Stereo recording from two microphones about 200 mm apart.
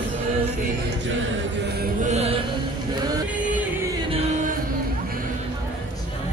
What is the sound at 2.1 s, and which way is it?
Mantra, 30° right (ahead or behind).